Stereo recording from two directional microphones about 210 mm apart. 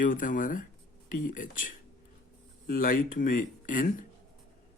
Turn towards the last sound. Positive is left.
turn(degrees=40)  # may be behind; listen again after turning